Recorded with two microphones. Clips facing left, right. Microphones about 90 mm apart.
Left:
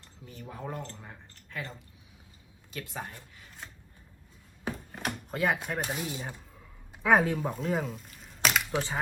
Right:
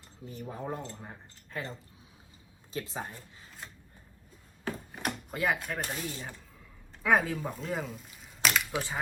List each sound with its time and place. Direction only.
0.0 s speech: 15° right (ahead or behind)
1.5 s speech: 30° right (ahead or behind)
2.7 s speech: 20° right (ahead or behind)
3.6 s scissors: centre (ahead or behind)
4.7 s a sound: 15° left (ahead or behind)
5.0 s drawer open or close: centre (ahead or behind)
5.6 s speech: centre (ahead or behind)